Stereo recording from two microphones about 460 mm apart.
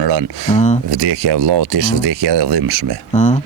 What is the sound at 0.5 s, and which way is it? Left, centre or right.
Speech, centre.